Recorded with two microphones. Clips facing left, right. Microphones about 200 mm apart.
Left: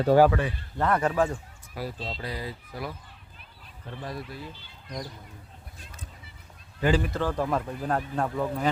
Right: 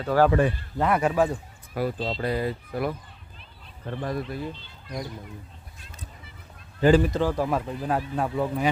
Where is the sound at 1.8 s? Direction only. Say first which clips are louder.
Right 7 dB; 55° right (ahead or behind).